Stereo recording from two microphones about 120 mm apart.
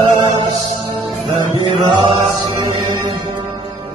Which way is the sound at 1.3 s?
40° right (ahead or behind).